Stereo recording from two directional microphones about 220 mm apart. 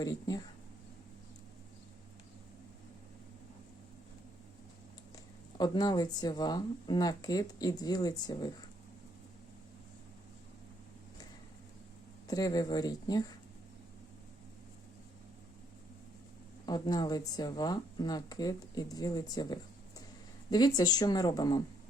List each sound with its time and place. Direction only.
0.0 s speech: 15° left (ahead or behind)
5.5 s speech: 20° left (ahead or behind)
12.3 s speech: 15° left (ahead or behind)
16.6 s speech: 20° left (ahead or behind)